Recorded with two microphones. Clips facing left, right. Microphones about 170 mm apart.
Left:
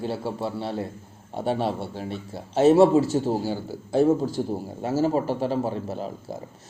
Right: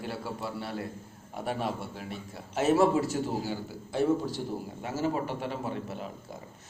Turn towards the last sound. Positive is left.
turn(degrees=35)  # may be behind; listen again after turning